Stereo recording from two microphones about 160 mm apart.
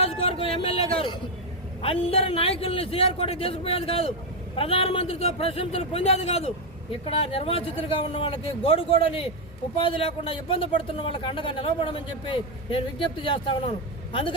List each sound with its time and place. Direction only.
0.0 s a man's voice: 40° left (ahead or behind)